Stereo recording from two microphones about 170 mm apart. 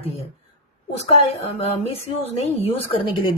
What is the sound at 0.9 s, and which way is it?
A woman's voice, 40° left (ahead or behind).